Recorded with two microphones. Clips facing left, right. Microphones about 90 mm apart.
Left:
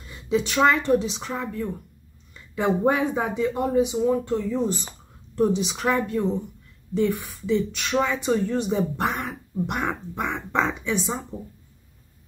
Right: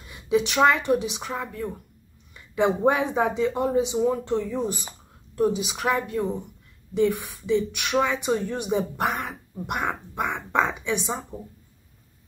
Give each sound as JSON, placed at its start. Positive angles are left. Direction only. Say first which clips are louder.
{"t": 0.1, "sound": "speech", "louder": "right 1 dB", "side_deg": -20}